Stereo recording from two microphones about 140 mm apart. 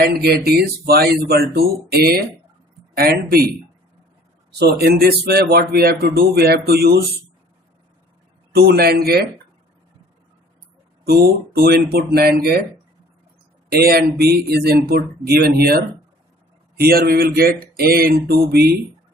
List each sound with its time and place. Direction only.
0.0 s speech: 90° right
4.7 s speech: 90° right
8.5 s speech: 90° right
11.1 s speech: 90° right
13.7 s speech: 90° right
16.9 s speech: 90° right